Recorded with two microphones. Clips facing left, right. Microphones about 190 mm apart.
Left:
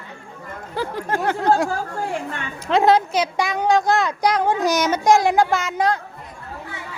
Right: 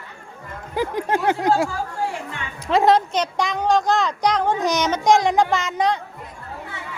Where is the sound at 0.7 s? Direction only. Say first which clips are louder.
Right 2 dB; 15° right (ahead or behind).